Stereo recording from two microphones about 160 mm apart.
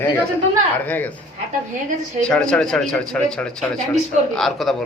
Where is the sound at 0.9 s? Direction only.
10° left (ahead or behind).